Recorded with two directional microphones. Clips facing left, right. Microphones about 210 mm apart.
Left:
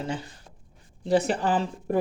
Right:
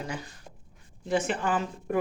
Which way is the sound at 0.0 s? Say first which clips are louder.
Left 4 dB; 30° left (ahead or behind).